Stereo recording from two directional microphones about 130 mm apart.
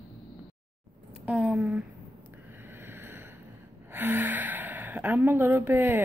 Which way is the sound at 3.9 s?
15° right (ahead or behind).